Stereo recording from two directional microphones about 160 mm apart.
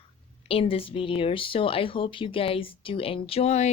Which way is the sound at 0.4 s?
35° left (ahead or behind).